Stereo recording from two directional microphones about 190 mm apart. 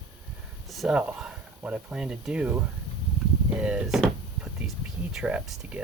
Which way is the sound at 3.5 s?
5° right (ahead or behind).